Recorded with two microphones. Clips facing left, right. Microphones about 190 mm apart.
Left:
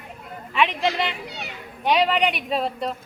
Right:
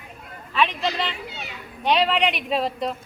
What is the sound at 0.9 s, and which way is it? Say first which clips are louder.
Speech: left 2 dB; 15° left (ahead or behind).